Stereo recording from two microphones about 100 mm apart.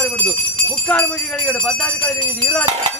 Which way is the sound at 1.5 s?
15° left (ahead or behind).